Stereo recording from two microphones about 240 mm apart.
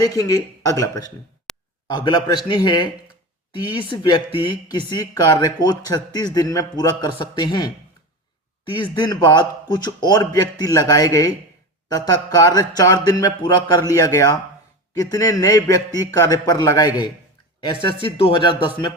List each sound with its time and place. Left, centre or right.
0.0 s speech: centre
1.5 s a sound: centre
2.0 s speech: centre
8.7 s speech: centre